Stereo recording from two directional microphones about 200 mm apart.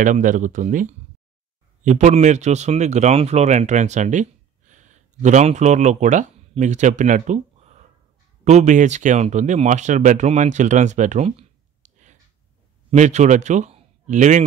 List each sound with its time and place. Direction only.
0.0 s a man's voice: 40° right (ahead or behind)